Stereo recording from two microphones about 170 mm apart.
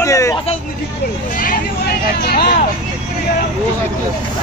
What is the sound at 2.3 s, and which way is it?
Speech, 65° left (ahead or behind).